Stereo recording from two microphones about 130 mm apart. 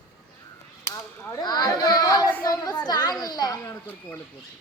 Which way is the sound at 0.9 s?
25° left (ahead or behind).